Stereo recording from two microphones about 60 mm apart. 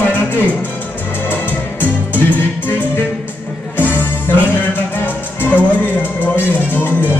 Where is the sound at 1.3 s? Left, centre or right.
Left.